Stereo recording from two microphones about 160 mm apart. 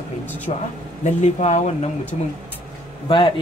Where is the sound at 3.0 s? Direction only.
35° left (ahead or behind).